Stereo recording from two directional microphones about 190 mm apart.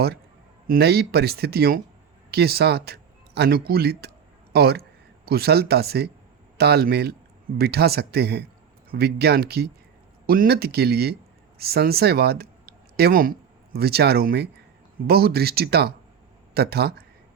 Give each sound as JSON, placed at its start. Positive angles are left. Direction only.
{"t": 0.7, "sound": "speech", "side_deg": -55}